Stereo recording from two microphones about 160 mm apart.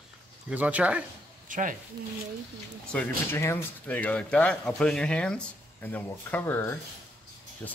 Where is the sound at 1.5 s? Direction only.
55° right (ahead or behind).